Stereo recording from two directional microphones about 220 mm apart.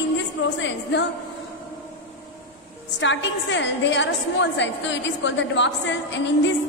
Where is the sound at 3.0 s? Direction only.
55° left (ahead or behind).